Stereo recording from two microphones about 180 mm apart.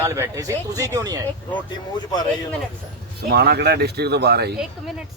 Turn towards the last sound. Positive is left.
turn(degrees=-65)  # may be behind; listen again after turning